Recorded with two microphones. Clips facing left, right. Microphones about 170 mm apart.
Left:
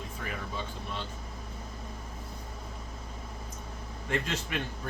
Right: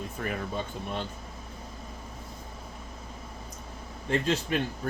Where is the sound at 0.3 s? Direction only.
50° right (ahead or behind).